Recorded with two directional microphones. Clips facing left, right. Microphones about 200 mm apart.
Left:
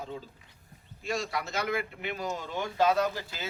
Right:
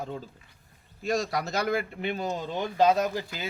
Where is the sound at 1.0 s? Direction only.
40° right (ahead or behind).